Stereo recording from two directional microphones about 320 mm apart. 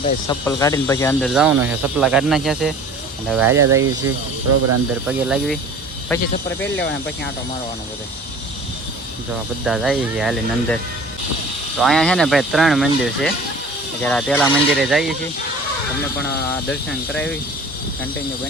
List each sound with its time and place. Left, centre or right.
0.3 s speech: centre
3.8 s speech: right
5.0 s speech: centre
9.6 s speech: centre
11.8 s speech: centre
17.1 s speech: centre